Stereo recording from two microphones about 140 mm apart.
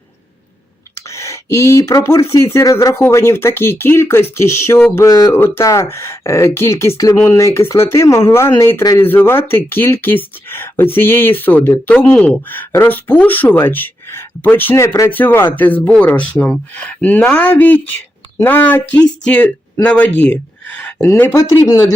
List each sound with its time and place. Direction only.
0.9 s speech: 20° left (ahead or behind)